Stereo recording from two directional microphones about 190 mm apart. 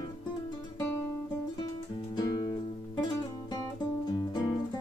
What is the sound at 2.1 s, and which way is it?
Music, 20° left (ahead or behind).